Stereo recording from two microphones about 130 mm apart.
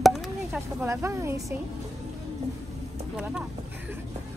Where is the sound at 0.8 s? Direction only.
20° right (ahead or behind).